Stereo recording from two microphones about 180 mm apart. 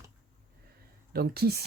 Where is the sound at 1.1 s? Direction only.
60° right (ahead or behind).